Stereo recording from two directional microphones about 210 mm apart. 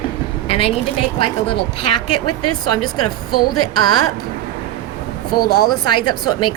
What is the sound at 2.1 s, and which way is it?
Speech, 90° left.